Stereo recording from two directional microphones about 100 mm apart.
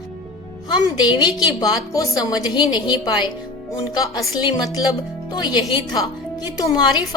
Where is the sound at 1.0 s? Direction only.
45° left (ahead or behind).